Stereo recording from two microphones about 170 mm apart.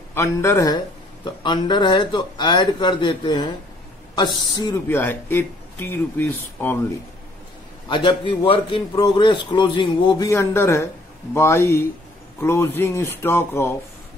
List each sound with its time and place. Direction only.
0.1 s a man's voice: 15° left (ahead or behind)
7.9 s a man's voice: 30° left (ahead or behind)